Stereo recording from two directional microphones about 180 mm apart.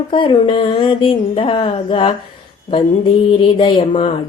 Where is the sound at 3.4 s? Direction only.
30° left (ahead or behind).